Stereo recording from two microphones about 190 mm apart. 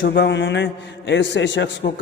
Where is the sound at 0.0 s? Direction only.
70° left (ahead or behind).